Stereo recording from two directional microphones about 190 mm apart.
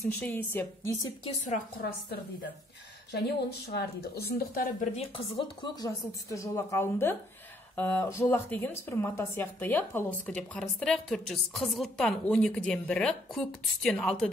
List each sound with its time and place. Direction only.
0.0 s a woman's voice: 10° left (ahead or behind)
3.1 s a woman's voice: 60° left (ahead or behind)
4.9 s a woman's voice: 30° left (ahead or behind); by 14.3 s 5° left (ahead or behind)